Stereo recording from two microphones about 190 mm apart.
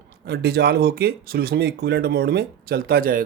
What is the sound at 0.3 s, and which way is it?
Speech, 60° right (ahead or behind).